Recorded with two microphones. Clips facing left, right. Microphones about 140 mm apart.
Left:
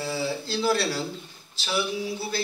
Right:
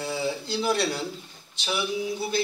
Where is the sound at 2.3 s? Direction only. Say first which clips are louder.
Right 4 dB; 20° right (ahead or behind).